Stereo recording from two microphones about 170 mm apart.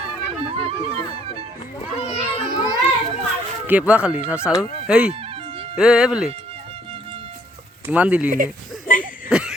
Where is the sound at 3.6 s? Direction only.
10° right (ahead or behind).